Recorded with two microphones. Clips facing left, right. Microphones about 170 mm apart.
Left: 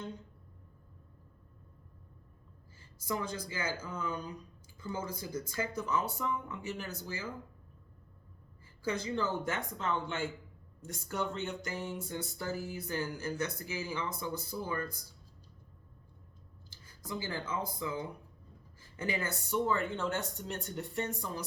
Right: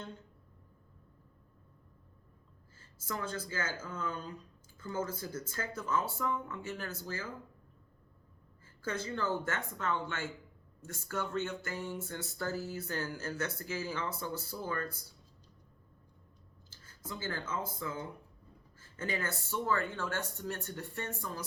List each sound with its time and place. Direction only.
3.0 s music: 15° left (ahead or behind)
8.8 s music: 15° left (ahead or behind)
11.3 s music: 15° left (ahead or behind)
16.6 s speech: 15° left (ahead or behind)
18.8 s music: 15° left (ahead or behind)
20.5 s speech: 20° left (ahead or behind)